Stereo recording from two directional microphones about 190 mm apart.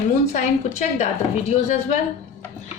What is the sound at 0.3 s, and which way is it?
Speech, 35° left (ahead or behind).